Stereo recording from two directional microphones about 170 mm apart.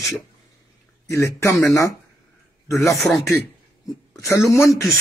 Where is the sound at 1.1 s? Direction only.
15° left (ahead or behind).